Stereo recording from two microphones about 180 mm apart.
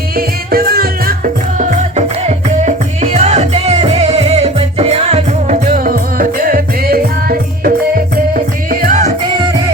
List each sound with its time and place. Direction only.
0.2 s music: 55° right (ahead or behind)